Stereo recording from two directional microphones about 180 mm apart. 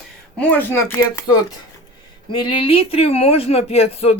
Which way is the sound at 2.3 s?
25° left (ahead or behind).